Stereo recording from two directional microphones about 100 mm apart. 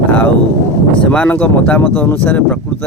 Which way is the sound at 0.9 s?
10° left (ahead or behind).